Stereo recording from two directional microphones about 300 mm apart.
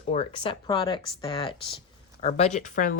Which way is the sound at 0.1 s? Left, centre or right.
Centre.